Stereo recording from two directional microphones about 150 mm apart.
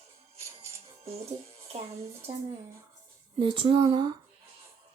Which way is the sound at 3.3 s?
35° right (ahead or behind).